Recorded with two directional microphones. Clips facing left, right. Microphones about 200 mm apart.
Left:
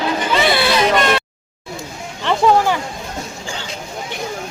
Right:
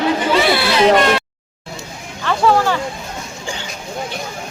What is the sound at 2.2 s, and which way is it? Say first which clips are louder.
Speech: left 1 dB; 20° left (ahead or behind).